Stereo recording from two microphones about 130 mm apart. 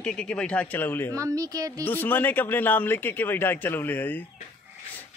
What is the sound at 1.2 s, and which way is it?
Speech, 25° right (ahead or behind).